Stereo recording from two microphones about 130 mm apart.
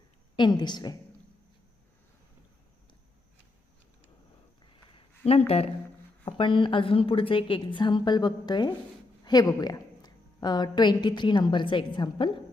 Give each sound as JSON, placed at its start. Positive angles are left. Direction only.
{"t": 0.3, "sound": "a woman's voice", "side_deg": 35}
{"t": 4.6, "sound": "a sound", "side_deg": 45}
{"t": 6.2, "sound": "a woman's voice", "side_deg": 40}